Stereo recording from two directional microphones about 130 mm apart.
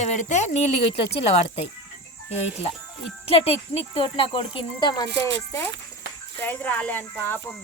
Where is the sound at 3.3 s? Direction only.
50° left (ahead or behind); by 5.1 s 35° left (ahead or behind).